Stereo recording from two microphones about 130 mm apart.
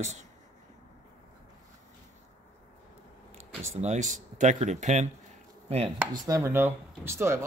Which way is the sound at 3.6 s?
60° right (ahead or behind).